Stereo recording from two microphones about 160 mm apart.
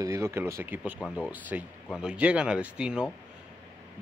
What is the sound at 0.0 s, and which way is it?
Speech, 20° right (ahead or behind).